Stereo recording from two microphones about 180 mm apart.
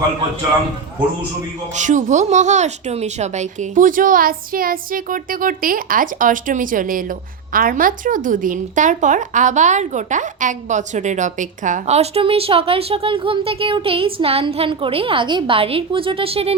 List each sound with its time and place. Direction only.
1.7 s speech: 45° right (ahead or behind)